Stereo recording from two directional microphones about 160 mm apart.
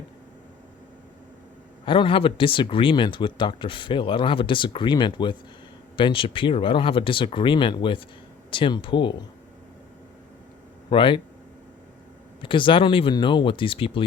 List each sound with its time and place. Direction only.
1.8 s speech: 30° left (ahead or behind)
10.8 s speech: 30° left (ahead or behind)
12.4 s speech: 30° left (ahead or behind)